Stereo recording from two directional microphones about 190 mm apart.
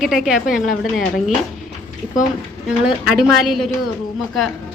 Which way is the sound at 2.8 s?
Centre (ahead or behind).